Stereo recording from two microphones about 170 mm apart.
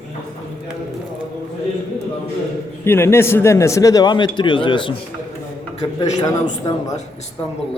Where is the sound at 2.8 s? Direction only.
15° left (ahead or behind); by 5.0 s 30° left (ahead or behind).